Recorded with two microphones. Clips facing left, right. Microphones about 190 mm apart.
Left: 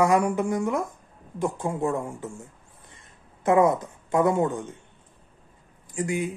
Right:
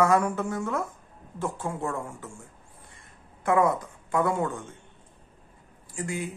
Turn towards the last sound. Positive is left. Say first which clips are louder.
# left 5 dB
turn(degrees=20)  # may be behind; listen again after turning